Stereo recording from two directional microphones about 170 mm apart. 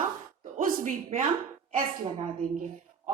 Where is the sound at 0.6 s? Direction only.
50° right (ahead or behind).